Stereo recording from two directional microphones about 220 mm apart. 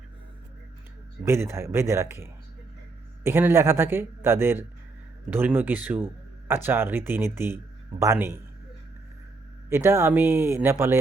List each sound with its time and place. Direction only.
1.2 s speech: 10° right (ahead or behind)
9.6 s speech: 10° right (ahead or behind)